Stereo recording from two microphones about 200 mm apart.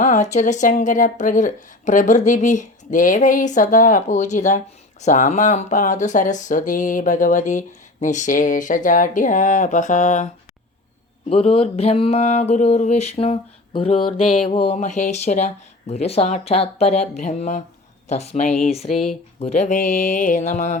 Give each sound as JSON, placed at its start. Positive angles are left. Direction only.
{"t": 0.0, "sound": "speech", "side_deg": 35}
{"t": 11.3, "sound": "speech", "side_deg": 30}